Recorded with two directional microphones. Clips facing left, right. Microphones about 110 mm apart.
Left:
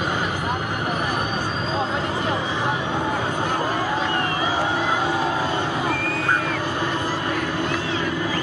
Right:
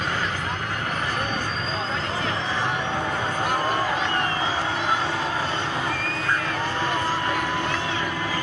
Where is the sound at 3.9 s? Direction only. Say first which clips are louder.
Left 2 dB; 15° left (ahead or behind).